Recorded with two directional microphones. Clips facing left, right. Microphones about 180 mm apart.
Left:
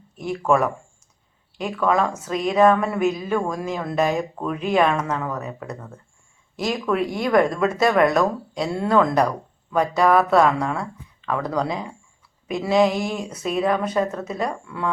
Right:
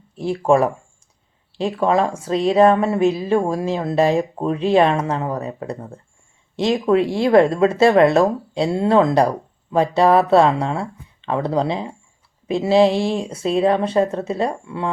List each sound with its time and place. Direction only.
0.2 s speech: 30° right (ahead or behind)